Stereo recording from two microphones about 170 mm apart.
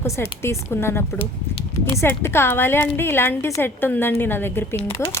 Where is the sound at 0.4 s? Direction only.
15° left (ahead or behind).